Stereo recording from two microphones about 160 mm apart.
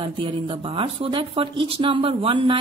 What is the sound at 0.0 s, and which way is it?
A woman's voice, 35° right (ahead or behind).